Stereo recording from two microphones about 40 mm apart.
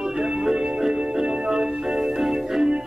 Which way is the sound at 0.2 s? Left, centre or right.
Centre.